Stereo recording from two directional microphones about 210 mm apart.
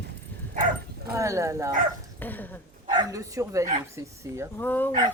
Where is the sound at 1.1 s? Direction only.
15° right (ahead or behind).